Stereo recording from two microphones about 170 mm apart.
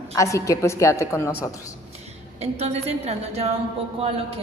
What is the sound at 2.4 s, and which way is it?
A woman's voice, 40° right (ahead or behind).